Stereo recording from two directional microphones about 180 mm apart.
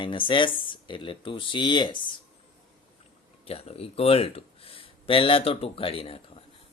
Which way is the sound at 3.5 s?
35° left (ahead or behind).